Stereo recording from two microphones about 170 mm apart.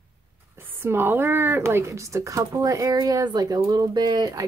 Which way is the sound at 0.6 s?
15° right (ahead or behind).